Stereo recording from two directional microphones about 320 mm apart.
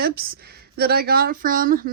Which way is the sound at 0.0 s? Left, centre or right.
Right.